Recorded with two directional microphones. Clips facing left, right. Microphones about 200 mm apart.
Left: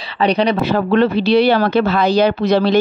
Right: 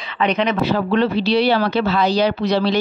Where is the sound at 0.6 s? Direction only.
55° left (ahead or behind).